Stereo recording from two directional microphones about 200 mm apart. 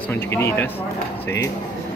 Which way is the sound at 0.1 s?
10° left (ahead or behind).